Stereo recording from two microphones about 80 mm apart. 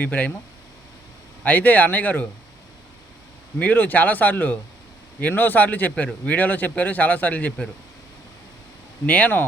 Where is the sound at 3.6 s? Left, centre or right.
Left.